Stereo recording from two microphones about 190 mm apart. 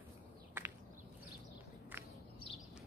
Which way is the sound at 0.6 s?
10° right (ahead or behind).